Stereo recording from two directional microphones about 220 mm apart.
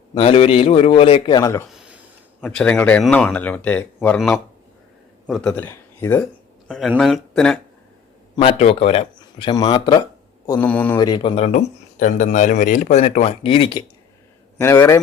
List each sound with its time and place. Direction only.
0.1 s speech: 25° left (ahead or behind)
2.4 s speech: 5° left (ahead or behind)
6.7 s speech: centre (ahead or behind)
8.4 s speech: 25° left (ahead or behind); by 10.9 s 5° left (ahead or behind)
10.9 s speech: 20° left (ahead or behind)
14.6 s speech: 10° left (ahead or behind)